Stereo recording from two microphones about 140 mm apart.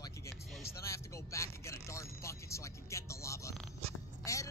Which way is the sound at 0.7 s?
20° left (ahead or behind).